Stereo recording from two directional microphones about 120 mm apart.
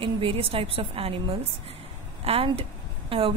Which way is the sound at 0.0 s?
50° right (ahead or behind).